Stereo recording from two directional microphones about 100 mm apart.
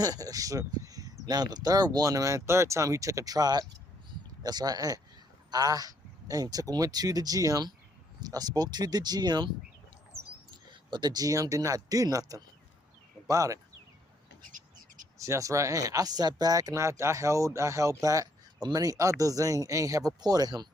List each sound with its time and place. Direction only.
0.0 s speech: 40° right (ahead or behind)
15.2 s speech: 30° right (ahead or behind)